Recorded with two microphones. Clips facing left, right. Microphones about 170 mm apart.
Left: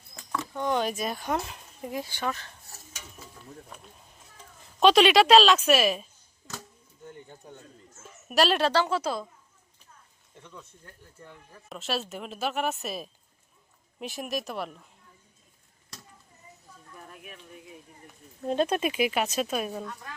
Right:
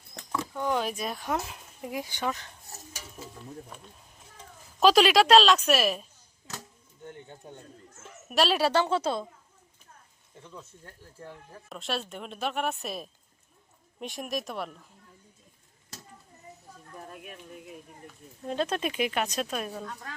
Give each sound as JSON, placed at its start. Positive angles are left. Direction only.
{"t": 0.3, "sound": "speech", "side_deg": -10}
{"t": 1.8, "sound": "speech", "side_deg": -10}
{"t": 4.8, "sound": "a woman's voice", "side_deg": 0}
{"t": 8.3, "sound": "a woman's voice", "side_deg": 0}
{"t": 8.7, "sound": "a woman's voice", "side_deg": -25}
{"t": 11.7, "sound": "a woman's voice", "side_deg": 0}
{"t": 18.4, "sound": "speech", "side_deg": 15}